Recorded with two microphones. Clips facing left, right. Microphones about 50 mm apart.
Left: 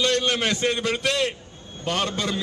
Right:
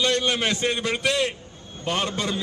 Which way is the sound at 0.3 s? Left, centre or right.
Centre.